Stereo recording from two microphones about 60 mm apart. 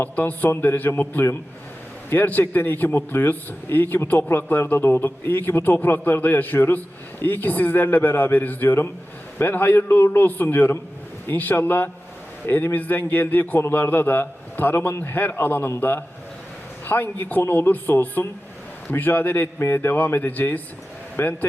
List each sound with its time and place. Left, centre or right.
0.0 s a man's voice: left